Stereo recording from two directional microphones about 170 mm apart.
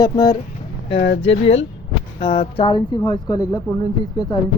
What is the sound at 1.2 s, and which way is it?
Speech, 40° left (ahead or behind).